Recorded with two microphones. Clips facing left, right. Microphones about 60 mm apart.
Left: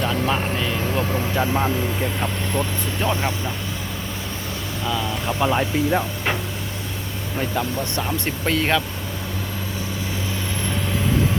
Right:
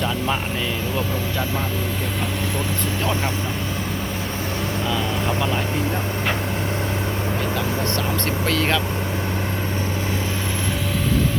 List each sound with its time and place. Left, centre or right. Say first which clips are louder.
0.9 s speech: left 2 dB; left
5.4 s speech: left 3 dB; centre
8.4 s speech: left 2 dB; centre